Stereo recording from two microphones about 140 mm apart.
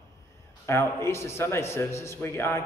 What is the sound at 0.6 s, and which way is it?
A man's voice, 20° left (ahead or behind).